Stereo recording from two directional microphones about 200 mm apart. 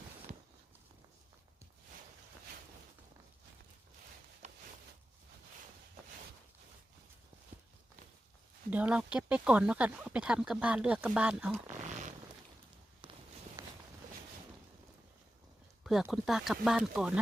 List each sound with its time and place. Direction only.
8.7 s speech: 5° right (ahead or behind)
13.6 s walk: 15° right (ahead or behind)
15.8 s speech: centre (ahead or behind)